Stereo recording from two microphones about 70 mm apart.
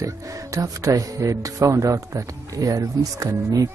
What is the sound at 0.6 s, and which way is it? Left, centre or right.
Speech, right.